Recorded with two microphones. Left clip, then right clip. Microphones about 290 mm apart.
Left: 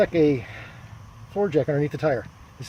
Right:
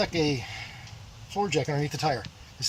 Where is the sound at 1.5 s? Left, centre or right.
Centre.